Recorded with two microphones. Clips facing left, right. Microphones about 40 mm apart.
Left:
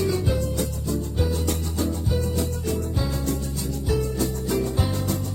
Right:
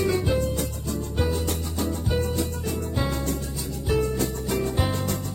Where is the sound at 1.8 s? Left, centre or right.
Right.